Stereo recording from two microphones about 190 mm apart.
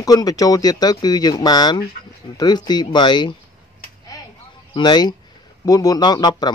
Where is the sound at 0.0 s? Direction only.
20° left (ahead or behind).